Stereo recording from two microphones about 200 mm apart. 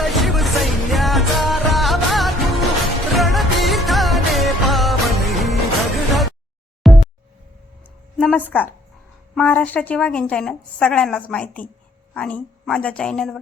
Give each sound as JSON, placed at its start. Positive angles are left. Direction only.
{"t": 0.0, "sound": "music", "side_deg": 0}
{"t": 6.8, "sound": "music", "side_deg": 0}
{"t": 8.2, "sound": "a woman's voice", "side_deg": 5}